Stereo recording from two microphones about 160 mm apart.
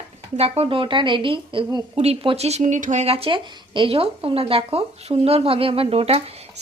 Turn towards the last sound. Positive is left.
turn(degrees=-40)  # may be behind; listen again after turning